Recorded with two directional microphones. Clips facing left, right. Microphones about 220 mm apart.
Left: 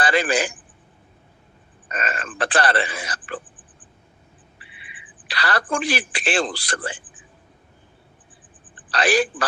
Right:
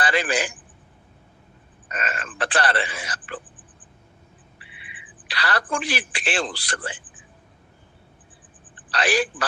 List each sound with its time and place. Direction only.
0.0 s a man's voice: 40° left (ahead or behind)
1.9 s a man's voice: 35° left (ahead or behind)
5.3 s a man's voice: 40° left (ahead or behind)
8.9 s a woman's voice: 40° left (ahead or behind)